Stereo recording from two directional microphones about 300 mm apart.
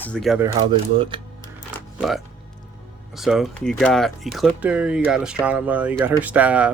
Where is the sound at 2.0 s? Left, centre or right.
Centre.